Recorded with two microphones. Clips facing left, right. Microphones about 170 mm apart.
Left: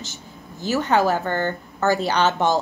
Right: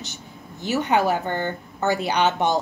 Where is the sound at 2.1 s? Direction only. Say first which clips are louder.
Left 1 dB; 15° right (ahead or behind).